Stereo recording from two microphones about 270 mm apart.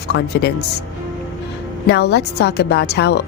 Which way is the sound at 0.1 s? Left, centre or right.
Left.